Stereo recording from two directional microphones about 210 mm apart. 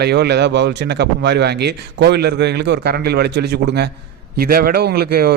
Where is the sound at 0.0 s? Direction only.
50° right (ahead or behind).